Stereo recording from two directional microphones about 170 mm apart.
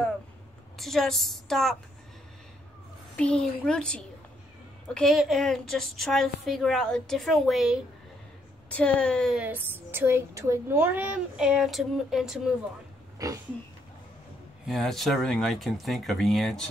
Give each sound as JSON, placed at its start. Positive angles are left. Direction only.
{"t": 0.7, "sound": "a woman's voice", "side_deg": 0}
{"t": 3.2, "sound": "a woman's voice", "side_deg": 5}
{"t": 9.4, "sound": "a child's voice", "side_deg": -10}
{"t": 13.2, "sound": "speech", "side_deg": -20}
{"t": 14.7, "sound": "a woman's voice", "side_deg": 0}